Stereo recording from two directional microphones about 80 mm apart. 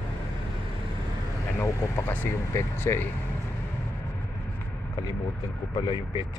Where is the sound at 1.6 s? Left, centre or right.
Left.